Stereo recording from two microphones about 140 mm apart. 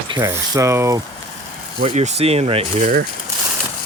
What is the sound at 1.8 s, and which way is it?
Speech, 50° right (ahead or behind).